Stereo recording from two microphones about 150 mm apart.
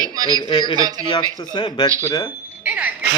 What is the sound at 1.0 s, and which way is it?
Speech, 30° left (ahead or behind).